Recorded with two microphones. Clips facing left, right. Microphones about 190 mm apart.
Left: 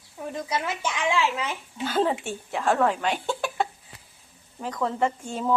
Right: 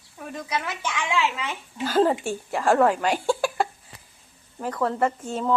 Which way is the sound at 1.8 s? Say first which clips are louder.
Right 4 dB; 5° right (ahead or behind).